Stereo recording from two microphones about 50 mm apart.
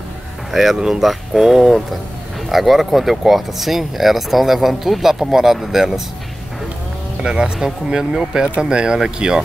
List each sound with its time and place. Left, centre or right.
0.5 s speech: centre
7.2 s speech: centre